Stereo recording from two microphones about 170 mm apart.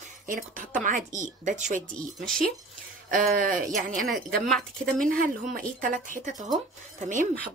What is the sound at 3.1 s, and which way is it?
Speech, 55° right (ahead or behind).